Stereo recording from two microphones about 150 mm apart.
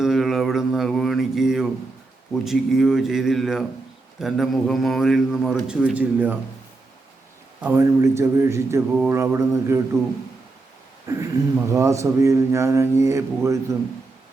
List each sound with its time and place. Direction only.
0.0 s mantra: centre (ahead or behind)
2.3 s a man's voice: centre (ahead or behind)
5.6 s mantra: 10° right (ahead or behind)
7.6 s speech: 15° right (ahead or behind)
9.0 s mantra: 15° right (ahead or behind)
11.0 s speech: 20° right (ahead or behind)